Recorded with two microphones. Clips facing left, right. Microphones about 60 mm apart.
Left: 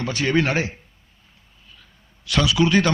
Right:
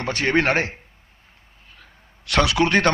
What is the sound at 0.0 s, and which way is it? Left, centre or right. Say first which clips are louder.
A man's voice: right 1 dB; right.